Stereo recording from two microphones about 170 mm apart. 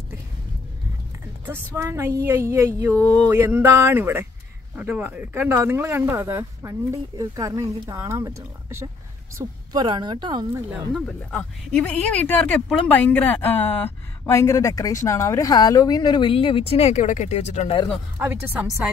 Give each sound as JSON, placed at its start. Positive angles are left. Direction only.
{"t": 1.8, "sound": "speech", "side_deg": -15}
{"t": 3.0, "sound": "a sound", "side_deg": 10}
{"t": 3.3, "sound": "a woman's voice", "side_deg": -10}
{"t": 10.7, "sound": "speech", "side_deg": 5}
{"t": 18.2, "sound": "speech", "side_deg": -10}